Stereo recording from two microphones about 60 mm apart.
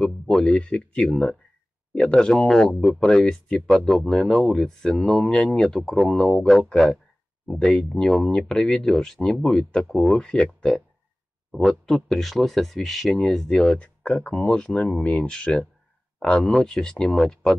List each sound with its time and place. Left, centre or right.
0.0 s speech: centre
6.7 s speech: centre
11.9 s speech: centre